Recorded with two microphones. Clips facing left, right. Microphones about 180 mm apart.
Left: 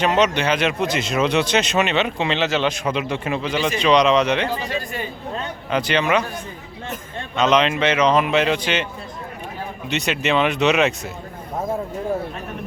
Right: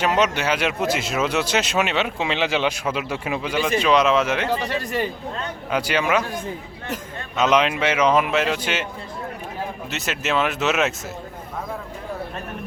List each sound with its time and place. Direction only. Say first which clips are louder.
0.0 s speech: left 2 dB; 5° right (ahead or behind)
4.6 s speech: right 2 dB; 70° right (ahead or behind)
5.7 s speech: left 2 dB; 10° right (ahead or behind)
7.3 s speech: left 1 dB; 10° right (ahead or behind)
9.9 s speech: left 5 dB; centre (ahead or behind)